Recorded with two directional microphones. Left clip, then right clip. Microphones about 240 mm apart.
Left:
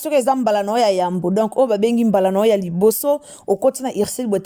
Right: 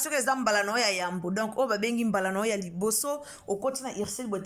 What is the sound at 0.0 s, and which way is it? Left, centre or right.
Speech, left.